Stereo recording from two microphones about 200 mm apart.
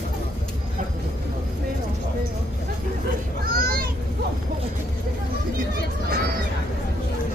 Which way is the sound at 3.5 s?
45° right (ahead or behind).